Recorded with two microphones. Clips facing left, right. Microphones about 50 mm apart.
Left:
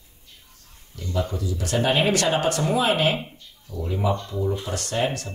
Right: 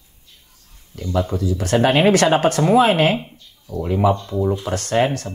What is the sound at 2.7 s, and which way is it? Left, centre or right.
Speech, right.